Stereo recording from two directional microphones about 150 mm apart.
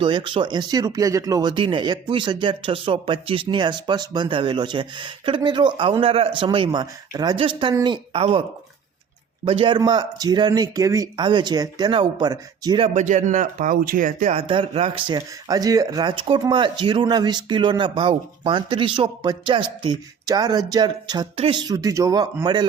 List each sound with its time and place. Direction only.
0.0 s speech: 35° right (ahead or behind)
12.9 s speech: 55° right (ahead or behind)
14.3 s speech: 35° right (ahead or behind)